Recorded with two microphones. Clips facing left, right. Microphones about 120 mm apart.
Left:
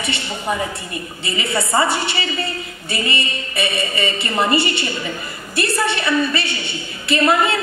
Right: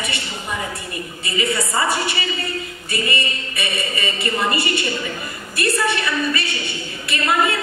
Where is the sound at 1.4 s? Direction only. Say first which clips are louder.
Left 2 dB; 30° left (ahead or behind).